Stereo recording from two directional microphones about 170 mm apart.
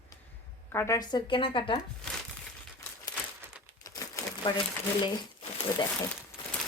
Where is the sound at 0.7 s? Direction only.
20° left (ahead or behind).